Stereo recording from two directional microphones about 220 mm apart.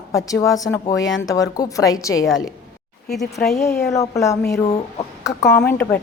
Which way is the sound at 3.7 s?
15° left (ahead or behind).